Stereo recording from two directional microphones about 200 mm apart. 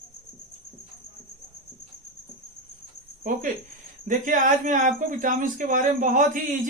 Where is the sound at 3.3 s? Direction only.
40° right (ahead or behind).